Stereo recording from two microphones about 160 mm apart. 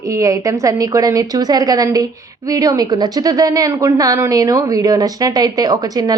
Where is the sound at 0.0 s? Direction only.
20° right (ahead or behind).